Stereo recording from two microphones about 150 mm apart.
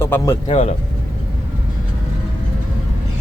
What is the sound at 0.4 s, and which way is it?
Speech, 45° left (ahead or behind).